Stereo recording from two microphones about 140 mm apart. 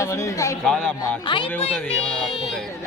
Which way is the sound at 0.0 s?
20° left (ahead or behind).